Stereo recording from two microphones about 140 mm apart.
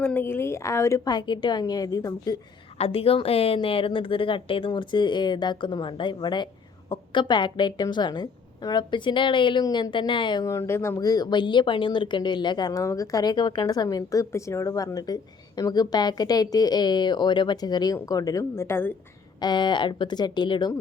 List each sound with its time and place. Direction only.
0.0 s speech: 15° left (ahead or behind)
2.7 s a woman's voice: 45° left (ahead or behind)
10.4 s speech: 20° left (ahead or behind)
19.4 s a woman's voice: 30° left (ahead or behind)